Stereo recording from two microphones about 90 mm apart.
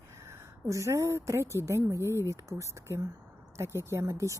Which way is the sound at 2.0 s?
30° left (ahead or behind).